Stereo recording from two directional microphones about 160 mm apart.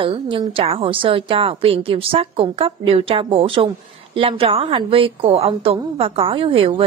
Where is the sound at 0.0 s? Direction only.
30° right (ahead or behind).